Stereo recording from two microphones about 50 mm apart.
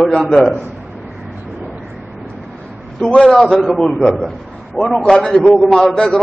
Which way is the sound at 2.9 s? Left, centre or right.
Centre.